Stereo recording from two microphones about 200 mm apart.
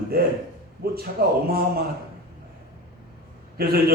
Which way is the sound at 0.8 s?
50° right (ahead or behind).